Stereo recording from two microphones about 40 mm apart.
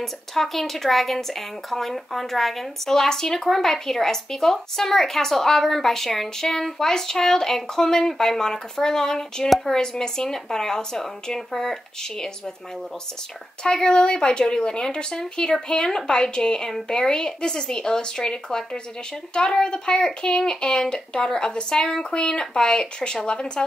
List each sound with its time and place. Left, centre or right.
0.0 s speech: centre
13.7 s speech: centre